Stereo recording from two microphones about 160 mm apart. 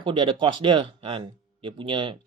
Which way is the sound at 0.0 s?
30° right (ahead or behind).